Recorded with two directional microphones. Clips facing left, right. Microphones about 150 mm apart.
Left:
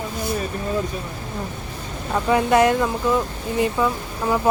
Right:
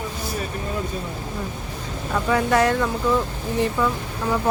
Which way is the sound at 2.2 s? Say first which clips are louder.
Left 3 dB; 20° left (ahead or behind).